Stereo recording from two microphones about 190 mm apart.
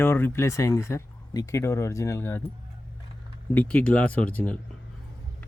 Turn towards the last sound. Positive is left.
turn(degrees=5)  # may be behind; listen again after turning